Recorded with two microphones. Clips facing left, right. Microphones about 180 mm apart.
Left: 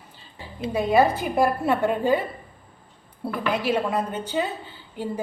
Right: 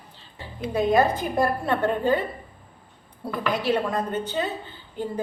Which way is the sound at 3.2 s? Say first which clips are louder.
Left 1 dB; 10° left (ahead or behind).